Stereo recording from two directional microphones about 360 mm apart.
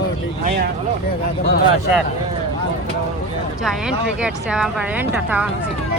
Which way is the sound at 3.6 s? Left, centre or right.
Centre.